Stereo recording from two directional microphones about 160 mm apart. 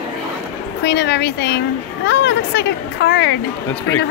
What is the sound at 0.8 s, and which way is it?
A child's voice, 90° left.